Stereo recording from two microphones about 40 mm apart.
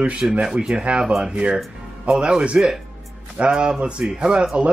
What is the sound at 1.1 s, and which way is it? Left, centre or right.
Speech, centre.